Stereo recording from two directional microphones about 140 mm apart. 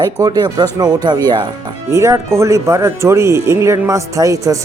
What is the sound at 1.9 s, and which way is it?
Speech, 20° right (ahead or behind).